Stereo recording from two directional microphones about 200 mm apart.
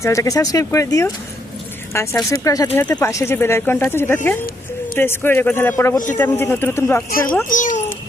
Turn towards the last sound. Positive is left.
turn(degrees=40)  # may be behind; listen again after turning